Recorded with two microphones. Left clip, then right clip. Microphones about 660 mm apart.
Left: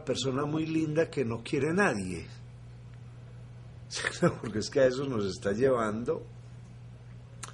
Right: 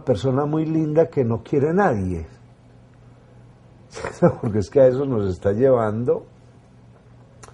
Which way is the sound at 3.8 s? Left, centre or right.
Right.